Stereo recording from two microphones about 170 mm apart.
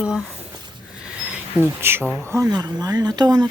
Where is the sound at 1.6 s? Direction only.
15° right (ahead or behind).